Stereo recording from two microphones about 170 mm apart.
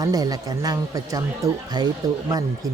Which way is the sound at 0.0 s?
20° right (ahead or behind).